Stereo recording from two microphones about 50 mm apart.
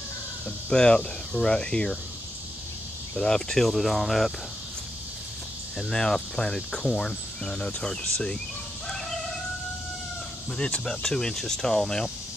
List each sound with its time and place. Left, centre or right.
0.7 s cricket: centre
3.2 s cricket: centre
3.6 s speech: centre
5.8 s cricket: centre
10.6 s cricket: centre